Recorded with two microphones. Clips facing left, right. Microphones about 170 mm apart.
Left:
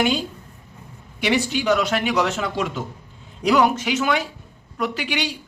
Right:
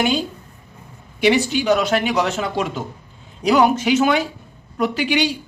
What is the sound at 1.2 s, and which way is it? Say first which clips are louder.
Speech: right 4 dB; 30° right (ahead or behind).